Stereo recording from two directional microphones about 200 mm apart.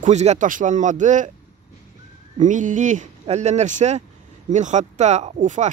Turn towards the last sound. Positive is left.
turn(degrees=-35)  # may be behind; listen again after turning